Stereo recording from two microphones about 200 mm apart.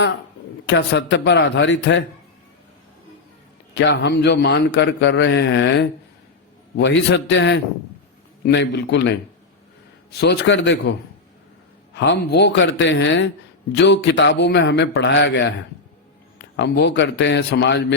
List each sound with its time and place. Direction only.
0.7 s a man's voice: 60° left (ahead or behind)
3.8 s a man's voice: 60° left (ahead or behind)
11.9 s a man's voice: 60° left (ahead or behind)
16.6 s a man's voice: 60° left (ahead or behind)